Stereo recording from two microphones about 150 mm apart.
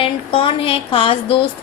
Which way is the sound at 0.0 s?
35° left (ahead or behind).